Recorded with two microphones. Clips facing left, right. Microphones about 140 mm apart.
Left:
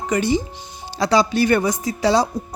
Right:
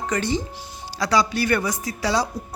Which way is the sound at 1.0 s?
25° left (ahead or behind).